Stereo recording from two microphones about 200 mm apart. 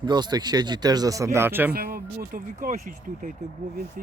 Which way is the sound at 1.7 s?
50° right (ahead or behind).